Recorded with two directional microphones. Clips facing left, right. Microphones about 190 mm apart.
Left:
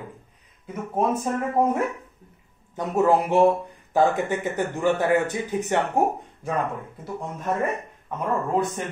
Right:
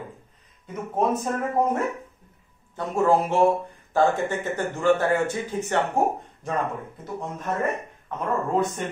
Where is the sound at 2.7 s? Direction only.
15° left (ahead or behind).